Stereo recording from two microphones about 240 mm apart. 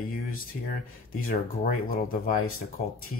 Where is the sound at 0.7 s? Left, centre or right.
Left.